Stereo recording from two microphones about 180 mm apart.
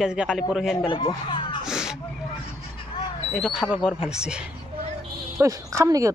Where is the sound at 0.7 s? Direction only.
30° left (ahead or behind).